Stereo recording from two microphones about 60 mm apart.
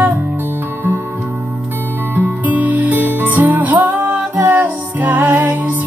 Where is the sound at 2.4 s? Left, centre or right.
Right.